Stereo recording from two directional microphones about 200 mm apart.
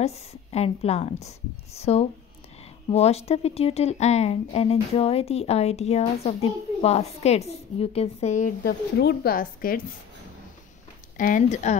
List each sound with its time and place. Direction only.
0.0 s speech: 30° left (ahead or behind)
8.6 s speech: 50° left (ahead or behind)
11.1 s speech: 40° left (ahead or behind)